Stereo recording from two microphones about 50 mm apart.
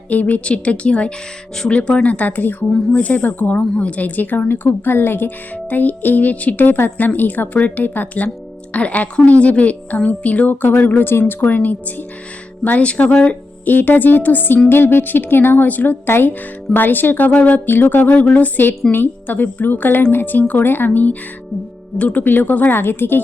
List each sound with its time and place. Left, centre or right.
0.1 s a woman's voice: left
13.2 s a woman's voice: left
17.7 s a woman's voice: left
22.8 s speech: left